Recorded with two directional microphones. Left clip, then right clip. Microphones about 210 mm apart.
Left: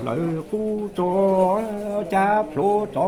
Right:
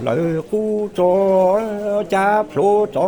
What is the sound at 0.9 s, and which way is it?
Music, 55° right (ahead or behind).